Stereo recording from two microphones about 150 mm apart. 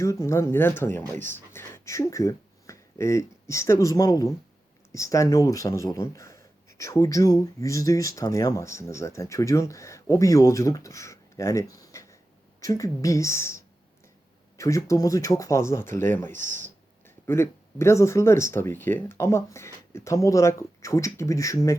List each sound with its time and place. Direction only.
0.0 s speech: 20° left (ahead or behind)
14.6 s speech: 20° left (ahead or behind)